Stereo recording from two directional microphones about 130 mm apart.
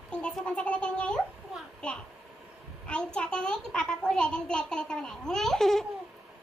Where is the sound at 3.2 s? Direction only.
5° left (ahead or behind).